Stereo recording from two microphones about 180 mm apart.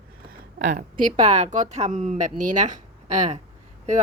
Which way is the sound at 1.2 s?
40° right (ahead or behind).